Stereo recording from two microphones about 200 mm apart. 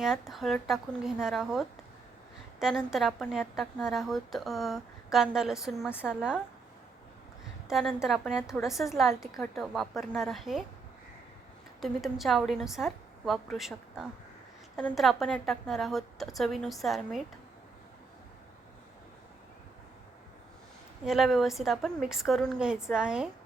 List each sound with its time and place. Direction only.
0.0 s a woman's voice: centre (ahead or behind)
7.7 s a woman's voice: centre (ahead or behind)
11.8 s a woman's voice: centre (ahead or behind)
21.0 s a woman's voice: centre (ahead or behind)